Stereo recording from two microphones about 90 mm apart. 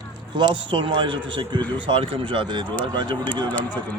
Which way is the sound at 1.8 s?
80° right.